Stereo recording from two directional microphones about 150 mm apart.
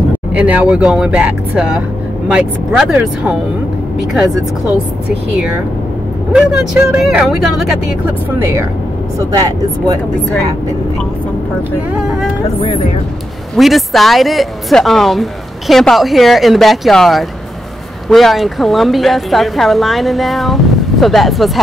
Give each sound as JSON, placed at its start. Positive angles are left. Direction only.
{"t": 0.3, "sound": "speech", "side_deg": -10}
{"t": 6.3, "sound": "speech", "side_deg": -5}
{"t": 9.2, "sound": "speech", "side_deg": -25}
{"t": 13.6, "sound": "speech", "side_deg": 0}